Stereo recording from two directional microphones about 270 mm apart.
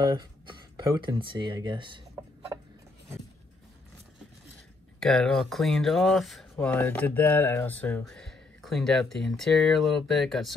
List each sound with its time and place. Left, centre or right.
0.1 s speech: centre
5.0 s speech: centre